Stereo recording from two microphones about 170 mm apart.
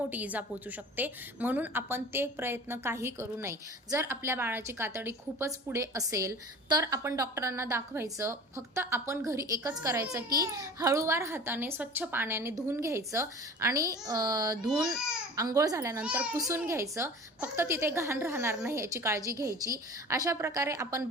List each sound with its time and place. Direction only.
0.1 s a woman's voice: 10° right (ahead or behind)
14.8 s speech: 5° right (ahead or behind)
15.4 s a woman's voice: 20° right (ahead or behind)